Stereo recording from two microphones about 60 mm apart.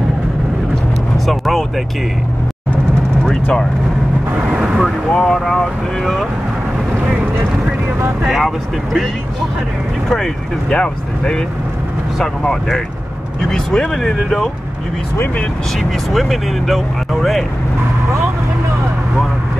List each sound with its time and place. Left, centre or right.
1.1 s vehicle: centre
3.3 s vehicle: centre
4.4 s speech: centre
5.1 s speech: centre
8.3 s speech: centre
15.8 s speech: centre